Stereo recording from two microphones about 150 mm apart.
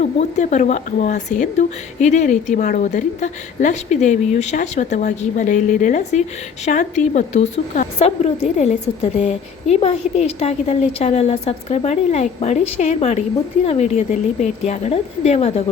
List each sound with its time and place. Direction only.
0.0 s a woman's voice: 50° left (ahead or behind)